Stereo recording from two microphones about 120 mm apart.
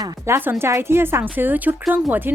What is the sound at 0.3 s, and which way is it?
A woman's voice, 25° right (ahead or behind).